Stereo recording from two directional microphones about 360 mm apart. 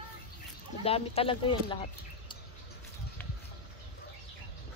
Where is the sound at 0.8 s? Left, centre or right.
Centre.